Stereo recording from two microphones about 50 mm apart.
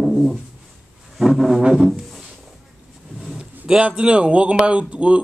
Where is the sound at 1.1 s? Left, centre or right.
Centre.